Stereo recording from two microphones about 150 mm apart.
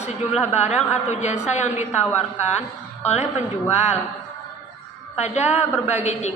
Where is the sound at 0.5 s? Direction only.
50° left (ahead or behind).